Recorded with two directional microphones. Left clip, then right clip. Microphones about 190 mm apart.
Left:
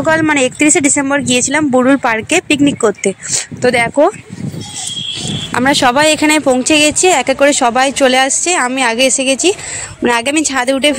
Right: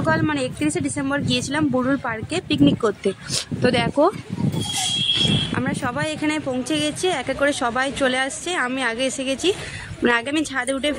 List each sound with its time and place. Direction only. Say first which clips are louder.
0.0 s speech: left 10 dB; 30° left (ahead or behind)
5.5 s speech: left 14 dB; 45° left (ahead or behind)